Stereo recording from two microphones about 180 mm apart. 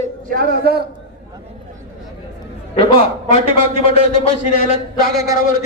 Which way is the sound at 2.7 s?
35° left (ahead or behind).